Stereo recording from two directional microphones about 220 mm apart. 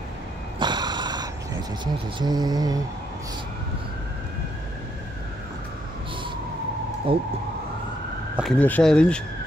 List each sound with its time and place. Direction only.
0.6 s vehicle: 20° right (ahead or behind)
2.1 s mantra: 20° right (ahead or behind)
7.1 s speech: 25° right (ahead or behind)
8.4 s speech: 5° left (ahead or behind)